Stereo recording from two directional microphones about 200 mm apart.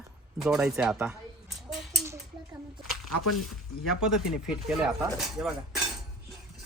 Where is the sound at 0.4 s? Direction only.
Centre (ahead or behind).